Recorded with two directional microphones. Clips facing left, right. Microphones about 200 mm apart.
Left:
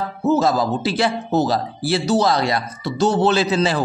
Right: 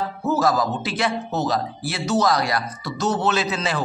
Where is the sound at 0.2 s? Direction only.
25° left (ahead or behind).